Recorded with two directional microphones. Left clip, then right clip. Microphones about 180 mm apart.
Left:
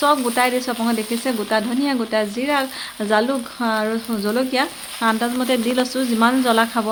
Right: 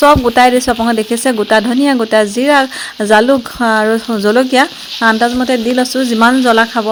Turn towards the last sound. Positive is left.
turn(degrees=-35)  # may be behind; listen again after turning